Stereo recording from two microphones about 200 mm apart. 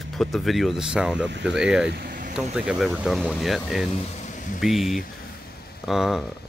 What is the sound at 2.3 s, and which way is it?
Speech, 5° right (ahead or behind).